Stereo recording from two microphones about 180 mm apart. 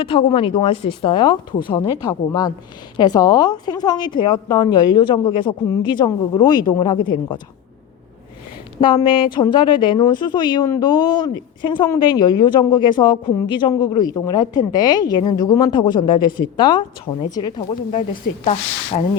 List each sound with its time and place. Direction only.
0.0 s a woman's voice: 30° left (ahead or behind)
8.8 s a woman's voice: 25° left (ahead or behind)
18.9 s sanding: 35° left (ahead or behind)